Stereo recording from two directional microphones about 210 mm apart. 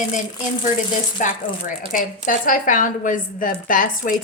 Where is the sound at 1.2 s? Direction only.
40° left (ahead or behind).